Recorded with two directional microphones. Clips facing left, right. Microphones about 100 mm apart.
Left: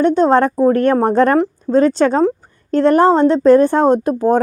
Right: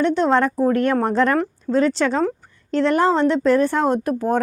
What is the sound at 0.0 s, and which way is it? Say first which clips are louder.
A woman's voice: left 5 dB; 40° left (ahead or behind).